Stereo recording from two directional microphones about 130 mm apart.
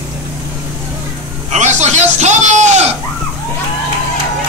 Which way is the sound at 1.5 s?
60° right (ahead or behind).